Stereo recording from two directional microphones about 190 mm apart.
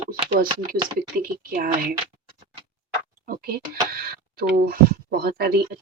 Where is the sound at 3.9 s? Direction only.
50° right (ahead or behind).